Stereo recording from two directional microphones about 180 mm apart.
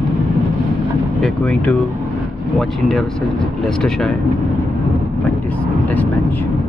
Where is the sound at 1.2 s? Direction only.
5° left (ahead or behind).